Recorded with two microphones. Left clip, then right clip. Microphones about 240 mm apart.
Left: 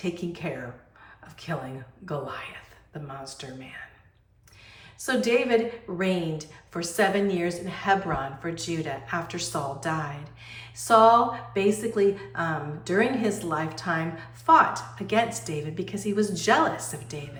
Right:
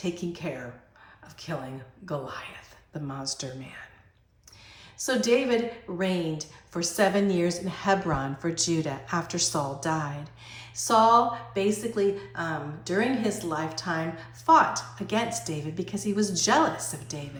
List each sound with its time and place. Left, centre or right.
0.0 s a woman's voice: centre
4.9 s a woman's voice: centre